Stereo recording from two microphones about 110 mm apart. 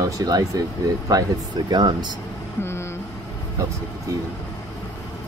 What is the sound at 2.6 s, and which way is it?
Vehicle, 20° left (ahead or behind).